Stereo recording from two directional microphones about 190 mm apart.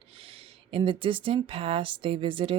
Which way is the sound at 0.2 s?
30° right (ahead or behind).